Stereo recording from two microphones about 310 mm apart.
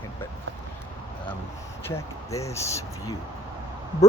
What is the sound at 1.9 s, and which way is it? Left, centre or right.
Speech, centre.